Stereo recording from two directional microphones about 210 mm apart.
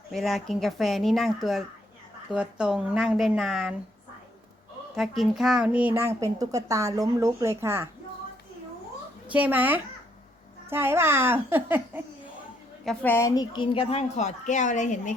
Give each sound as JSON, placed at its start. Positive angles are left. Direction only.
{"t": 0.1, "sound": "speech", "side_deg": 0}
{"t": 4.9, "sound": "speech", "side_deg": 0}
{"t": 9.3, "sound": "speech", "side_deg": -10}
{"t": 12.8, "sound": "a woman's voice", "side_deg": 5}